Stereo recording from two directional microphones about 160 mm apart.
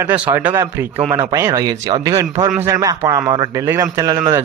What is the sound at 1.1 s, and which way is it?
A man's voice, 25° right (ahead or behind).